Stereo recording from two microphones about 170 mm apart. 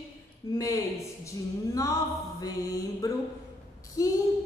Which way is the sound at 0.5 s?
20° left (ahead or behind).